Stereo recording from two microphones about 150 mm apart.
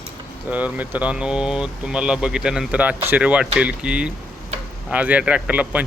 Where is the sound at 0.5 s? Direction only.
10° right (ahead or behind).